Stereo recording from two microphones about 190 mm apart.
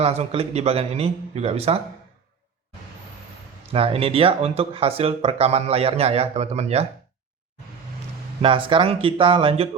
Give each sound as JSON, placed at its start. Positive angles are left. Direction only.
{"t": 0.0, "sound": "speech", "side_deg": -30}
{"t": 3.7, "sound": "speech", "side_deg": -30}
{"t": 8.4, "sound": "speech", "side_deg": -25}